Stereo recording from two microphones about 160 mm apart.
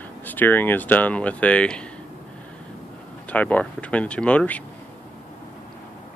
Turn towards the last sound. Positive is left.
turn(degrees=10)  # may be behind; listen again after turning